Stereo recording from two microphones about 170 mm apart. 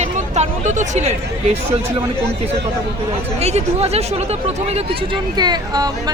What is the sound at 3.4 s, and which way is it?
Speech, 35° right (ahead or behind).